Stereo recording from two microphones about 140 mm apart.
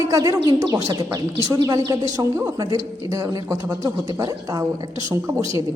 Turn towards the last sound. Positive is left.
turn(degrees=-20)  # may be behind; listen again after turning